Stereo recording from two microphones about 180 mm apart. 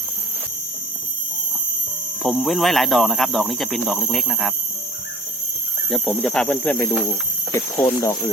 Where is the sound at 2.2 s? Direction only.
Centre (ahead or behind).